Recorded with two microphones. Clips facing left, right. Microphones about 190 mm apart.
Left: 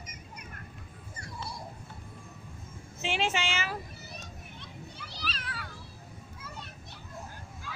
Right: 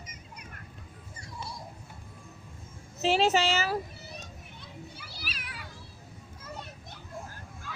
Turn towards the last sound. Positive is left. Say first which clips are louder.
# even
turn(degrees=-50)  # may be behind; listen again after turning